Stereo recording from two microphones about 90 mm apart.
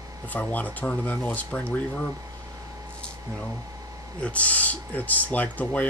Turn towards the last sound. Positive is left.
turn(degrees=15)  # may be behind; listen again after turning